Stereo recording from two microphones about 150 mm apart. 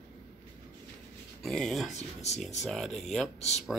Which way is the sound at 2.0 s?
50° left (ahead or behind).